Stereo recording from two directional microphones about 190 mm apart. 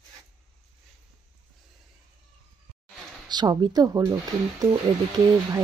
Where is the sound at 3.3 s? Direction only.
20° right (ahead or behind).